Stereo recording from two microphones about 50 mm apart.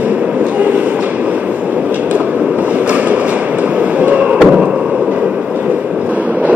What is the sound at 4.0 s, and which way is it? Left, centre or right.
Fireworks, right.